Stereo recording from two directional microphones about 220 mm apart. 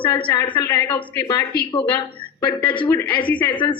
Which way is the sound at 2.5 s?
20° left (ahead or behind).